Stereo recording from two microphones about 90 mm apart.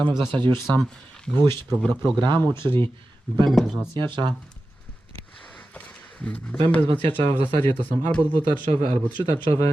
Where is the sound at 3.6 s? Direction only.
5° left (ahead or behind).